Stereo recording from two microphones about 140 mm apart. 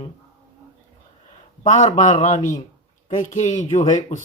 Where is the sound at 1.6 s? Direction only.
55° left (ahead or behind).